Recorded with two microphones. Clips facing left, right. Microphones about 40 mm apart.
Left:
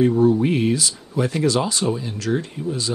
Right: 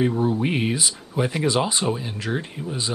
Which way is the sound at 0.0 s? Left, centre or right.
Centre.